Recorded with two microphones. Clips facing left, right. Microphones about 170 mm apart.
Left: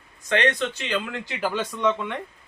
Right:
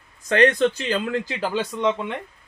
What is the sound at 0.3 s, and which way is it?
Speech, 40° right (ahead or behind).